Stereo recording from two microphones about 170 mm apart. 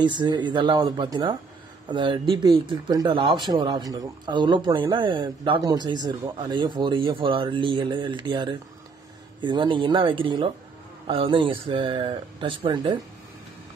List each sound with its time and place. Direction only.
0.0 s speech: 25° right (ahead or behind)